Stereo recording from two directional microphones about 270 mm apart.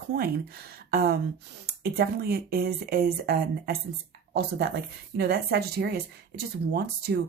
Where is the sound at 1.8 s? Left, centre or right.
Right.